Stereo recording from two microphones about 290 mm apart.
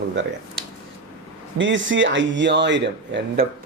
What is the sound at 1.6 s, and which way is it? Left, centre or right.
Speech, right.